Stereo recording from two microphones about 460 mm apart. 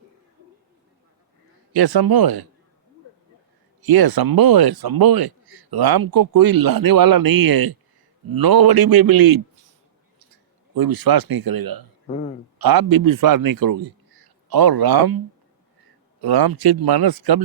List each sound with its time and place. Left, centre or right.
1.7 s speech: right
3.8 s speech: right
10.8 s speech: right
12.0 s a man's voice: centre
12.5 s speech: right
16.2 s speech: right